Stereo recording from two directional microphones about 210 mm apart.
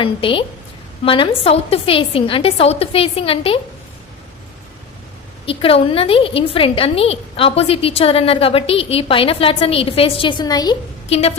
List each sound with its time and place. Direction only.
0.0 s a woman's voice: 25° left (ahead or behind)
5.5 s a woman's voice: 25° left (ahead or behind)